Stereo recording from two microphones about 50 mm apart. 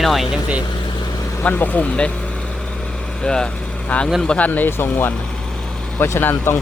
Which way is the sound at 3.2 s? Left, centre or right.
Centre.